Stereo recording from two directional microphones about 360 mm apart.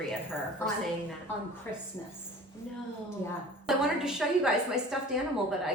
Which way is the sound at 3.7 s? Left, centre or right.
Centre.